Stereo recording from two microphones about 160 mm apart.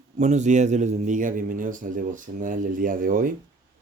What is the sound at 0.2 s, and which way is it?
A man's voice, 45° right (ahead or behind).